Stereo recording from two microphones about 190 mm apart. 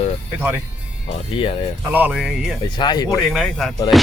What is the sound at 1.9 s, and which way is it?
Speech, 5° right (ahead or behind).